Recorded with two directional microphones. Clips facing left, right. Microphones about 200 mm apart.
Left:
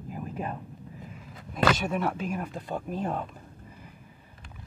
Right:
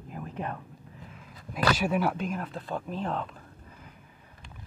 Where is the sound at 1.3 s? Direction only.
25° left (ahead or behind).